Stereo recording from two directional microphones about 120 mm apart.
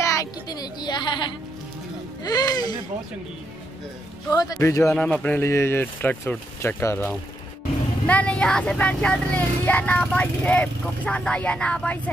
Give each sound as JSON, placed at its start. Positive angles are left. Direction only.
{"t": 0.0, "sound": "a sound", "side_deg": 25}
{"t": 2.2, "sound": "speech", "side_deg": 30}
{"t": 4.3, "sound": "speech", "side_deg": 30}
{"t": 4.9, "sound": "speech", "side_deg": 10}
{"t": 8.1, "sound": "speech", "side_deg": 10}